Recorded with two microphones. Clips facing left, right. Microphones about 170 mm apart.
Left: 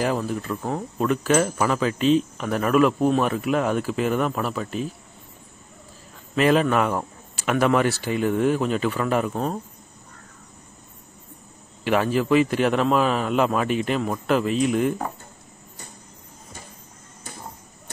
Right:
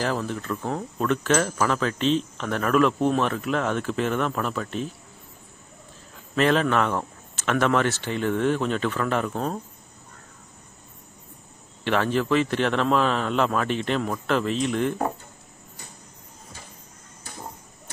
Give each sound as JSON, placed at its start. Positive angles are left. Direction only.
{"t": 0.0, "sound": "speech", "side_deg": 5}
{"t": 6.3, "sound": "speech", "side_deg": 5}
{"t": 11.8, "sound": "speech", "side_deg": 10}